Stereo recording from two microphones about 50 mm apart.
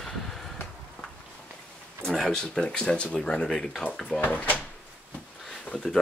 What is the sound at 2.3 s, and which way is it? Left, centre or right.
Speech, centre.